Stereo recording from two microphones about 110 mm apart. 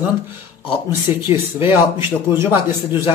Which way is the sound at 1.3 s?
20° right (ahead or behind).